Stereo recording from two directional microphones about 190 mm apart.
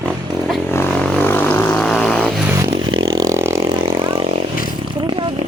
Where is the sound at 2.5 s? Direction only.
20° right (ahead or behind).